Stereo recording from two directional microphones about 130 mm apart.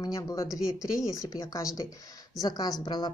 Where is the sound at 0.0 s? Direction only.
30° left (ahead or behind).